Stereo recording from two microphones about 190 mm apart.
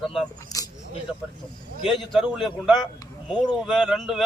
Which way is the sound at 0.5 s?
20° left (ahead or behind).